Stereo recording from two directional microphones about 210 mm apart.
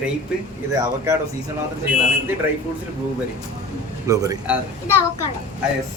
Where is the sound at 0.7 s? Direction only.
15° right (ahead or behind).